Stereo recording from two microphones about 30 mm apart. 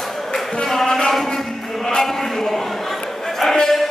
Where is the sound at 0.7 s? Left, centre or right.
Centre.